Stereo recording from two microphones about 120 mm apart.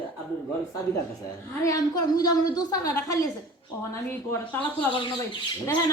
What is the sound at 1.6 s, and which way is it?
Speech, 30° left (ahead or behind).